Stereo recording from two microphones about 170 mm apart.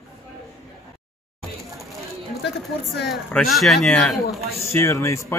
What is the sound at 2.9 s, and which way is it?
Speech, centre (ahead or behind).